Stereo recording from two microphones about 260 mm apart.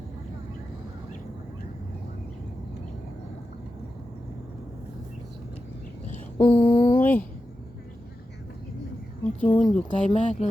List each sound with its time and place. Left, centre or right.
6.4 s a sound: centre
7.0 s speech: centre
9.2 s speech: centre
9.7 s speech: left